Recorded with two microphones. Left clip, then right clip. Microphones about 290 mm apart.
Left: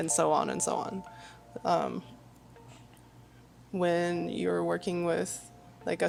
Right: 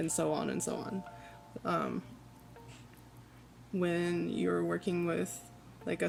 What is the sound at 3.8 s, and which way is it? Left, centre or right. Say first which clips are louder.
Speech: left 5 dB; centre.